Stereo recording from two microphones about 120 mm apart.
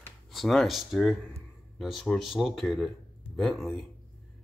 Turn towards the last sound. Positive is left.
turn(degrees=0)  # may be behind; listen again after turning